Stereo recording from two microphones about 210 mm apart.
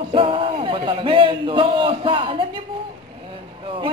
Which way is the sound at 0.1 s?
25° right (ahead or behind).